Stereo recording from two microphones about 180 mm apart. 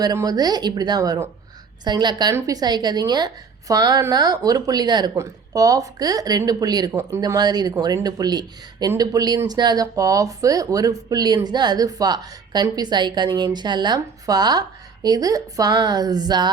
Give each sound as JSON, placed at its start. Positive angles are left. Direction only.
{"t": 0.0, "sound": "speech", "side_deg": -20}